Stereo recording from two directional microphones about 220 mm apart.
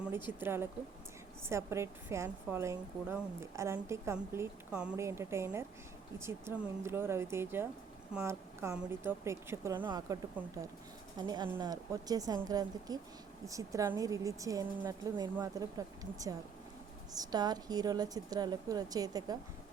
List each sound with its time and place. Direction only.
0.3 s a woman's voice: 10° right (ahead or behind)
17.1 s a woman's voice: 15° right (ahead or behind)